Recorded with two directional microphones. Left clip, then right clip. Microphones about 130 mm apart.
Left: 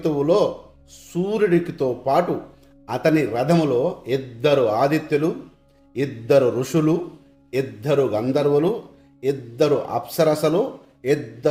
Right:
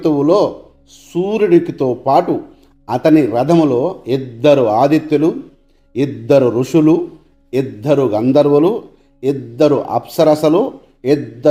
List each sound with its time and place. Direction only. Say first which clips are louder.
0.0 s a man's voice: right 6 dB; 25° right (ahead or behind)